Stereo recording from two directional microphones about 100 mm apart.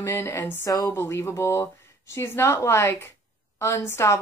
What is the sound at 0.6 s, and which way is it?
A woman's voice, 35° left (ahead or behind).